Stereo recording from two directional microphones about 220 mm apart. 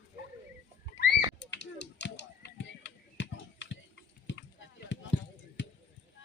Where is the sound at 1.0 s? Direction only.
55° left (ahead or behind).